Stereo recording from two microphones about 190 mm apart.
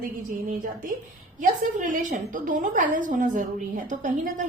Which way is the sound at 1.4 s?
45° right (ahead or behind).